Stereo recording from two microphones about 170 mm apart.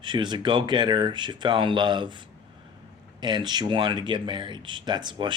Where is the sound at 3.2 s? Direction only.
25° right (ahead or behind).